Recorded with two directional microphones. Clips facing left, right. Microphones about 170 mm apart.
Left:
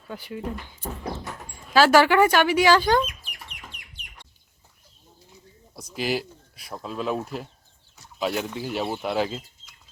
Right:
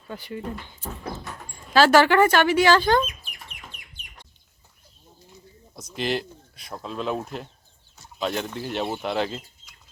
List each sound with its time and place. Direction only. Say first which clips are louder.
0.1 s speech: even; 5° left (ahead or behind)
3.5 s chicken: even; 75° left (ahead or behind)
5.7 s speech: even; 5° left (ahead or behind)